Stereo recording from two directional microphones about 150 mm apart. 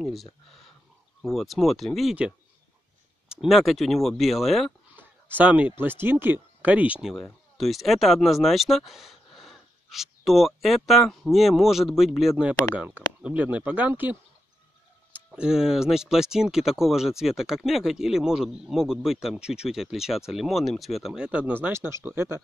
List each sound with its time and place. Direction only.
0.0 s speech: centre (ahead or behind)
4.9 s a sound: 10° right (ahead or behind)
5.8 s speech: 15° right (ahead or behind)
15.1 s speech: 5° right (ahead or behind)